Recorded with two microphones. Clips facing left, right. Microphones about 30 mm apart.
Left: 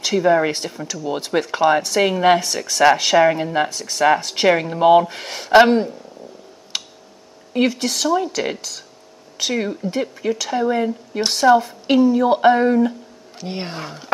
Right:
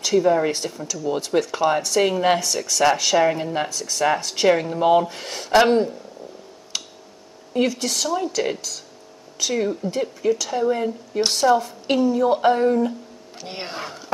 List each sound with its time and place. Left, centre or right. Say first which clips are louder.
0.0 s speech: left 2 dB; left
6.7 s a sound: left 3 dB; centre
7.5 s speech: left 2 dB; left
13.4 s speech: left 3 dB; centre